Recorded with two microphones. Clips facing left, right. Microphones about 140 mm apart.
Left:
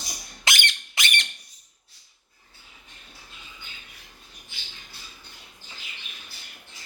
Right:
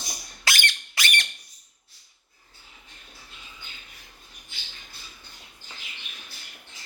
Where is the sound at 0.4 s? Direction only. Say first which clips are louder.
Even; 20° left (ahead or behind).